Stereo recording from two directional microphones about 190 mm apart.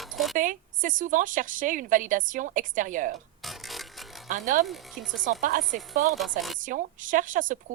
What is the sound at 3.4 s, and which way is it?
Music, centre (ahead or behind).